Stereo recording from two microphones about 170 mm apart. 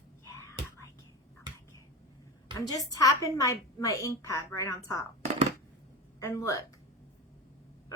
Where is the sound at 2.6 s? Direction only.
20° left (ahead or behind).